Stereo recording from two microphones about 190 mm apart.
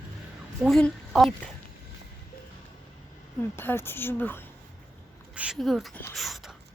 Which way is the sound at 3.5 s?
10° left (ahead or behind).